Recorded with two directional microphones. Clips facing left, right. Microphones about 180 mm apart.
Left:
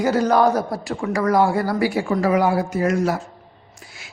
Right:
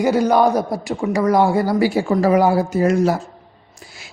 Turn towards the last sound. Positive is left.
turn(degrees=-30)  # may be behind; listen again after turning